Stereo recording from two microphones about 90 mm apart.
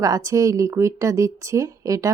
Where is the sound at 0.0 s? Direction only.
40° right (ahead or behind).